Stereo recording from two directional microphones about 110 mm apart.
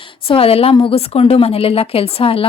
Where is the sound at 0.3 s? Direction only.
60° left (ahead or behind).